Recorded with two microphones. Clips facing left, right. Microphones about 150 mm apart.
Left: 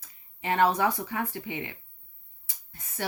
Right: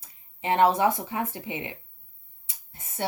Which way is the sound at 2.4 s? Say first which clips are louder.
Right 2 dB; 25° right (ahead or behind).